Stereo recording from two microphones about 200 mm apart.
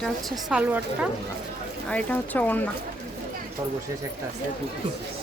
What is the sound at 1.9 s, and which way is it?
Speech, 5° left (ahead or behind).